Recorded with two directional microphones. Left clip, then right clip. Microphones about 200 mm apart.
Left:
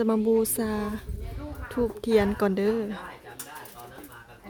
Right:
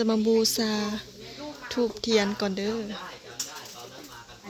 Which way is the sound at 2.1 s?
20° left (ahead or behind).